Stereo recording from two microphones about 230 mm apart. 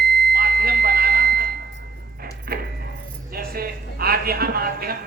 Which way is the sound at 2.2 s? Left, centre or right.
Right.